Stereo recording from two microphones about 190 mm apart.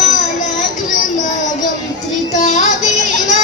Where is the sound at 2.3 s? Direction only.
40° left (ahead or behind).